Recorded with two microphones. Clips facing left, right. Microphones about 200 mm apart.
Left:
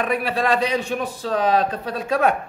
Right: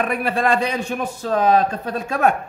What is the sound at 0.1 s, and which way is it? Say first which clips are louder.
A man's voice: right 1 dB; 50° right (ahead or behind).